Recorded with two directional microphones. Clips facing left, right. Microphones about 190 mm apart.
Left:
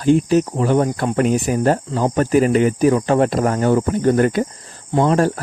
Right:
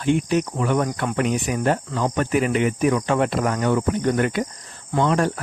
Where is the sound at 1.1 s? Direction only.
40° left (ahead or behind).